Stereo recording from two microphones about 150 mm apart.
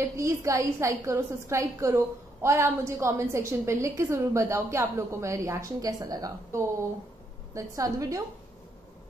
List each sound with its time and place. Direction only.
0.2 s a woman's voice: 20° right (ahead or behind)